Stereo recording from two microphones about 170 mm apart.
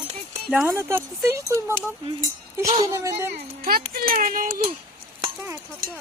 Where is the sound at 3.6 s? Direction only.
60° right (ahead or behind).